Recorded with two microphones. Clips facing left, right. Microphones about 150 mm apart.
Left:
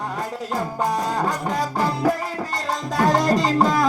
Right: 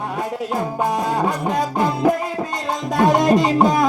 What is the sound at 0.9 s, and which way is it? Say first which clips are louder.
Music: right 3 dB; 5° right (ahead or behind).